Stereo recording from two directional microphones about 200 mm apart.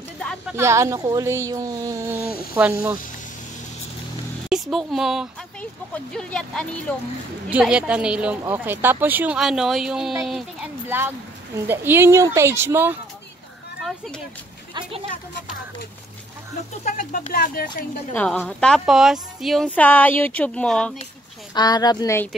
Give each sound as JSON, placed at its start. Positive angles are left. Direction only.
{"t": 0.2, "sound": "speech", "side_deg": 5}
{"t": 0.6, "sound": "speech", "side_deg": -15}
{"t": 4.5, "sound": "speech", "side_deg": 0}
{"t": 13.8, "sound": "speech", "side_deg": 0}
{"t": 14.7, "sound": "speech", "side_deg": -25}
{"t": 16.8, "sound": "speech", "side_deg": 40}
{"t": 18.1, "sound": "speech", "side_deg": 10}
{"t": 21.5, "sound": "a woman's voice", "side_deg": 20}